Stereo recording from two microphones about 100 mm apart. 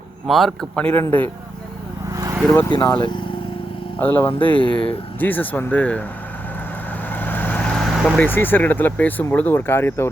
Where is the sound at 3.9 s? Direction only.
15° left (ahead or behind).